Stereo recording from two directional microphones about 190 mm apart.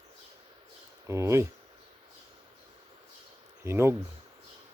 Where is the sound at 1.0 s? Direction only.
15° right (ahead or behind).